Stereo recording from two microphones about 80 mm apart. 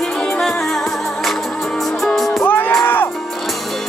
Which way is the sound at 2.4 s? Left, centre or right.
Left.